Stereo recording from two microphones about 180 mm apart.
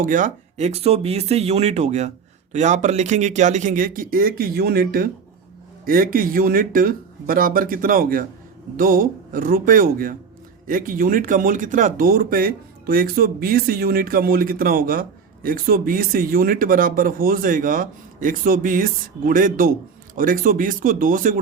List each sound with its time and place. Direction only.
0.0 s speech: 45° right (ahead or behind)